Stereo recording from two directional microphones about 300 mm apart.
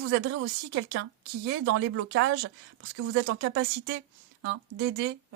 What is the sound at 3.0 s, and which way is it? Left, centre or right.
Speech, right.